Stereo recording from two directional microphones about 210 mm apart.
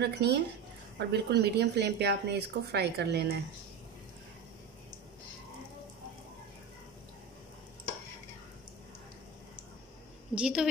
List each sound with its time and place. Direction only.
0.0 s a woman's voice: 50° right (ahead or behind)
10.3 s a woman's voice: 5° right (ahead or behind)